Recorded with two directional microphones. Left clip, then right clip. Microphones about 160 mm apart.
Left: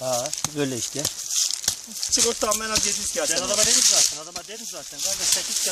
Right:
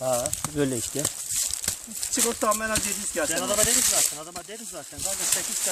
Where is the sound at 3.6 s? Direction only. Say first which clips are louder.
Left 5 dB; 30° right (ahead or behind).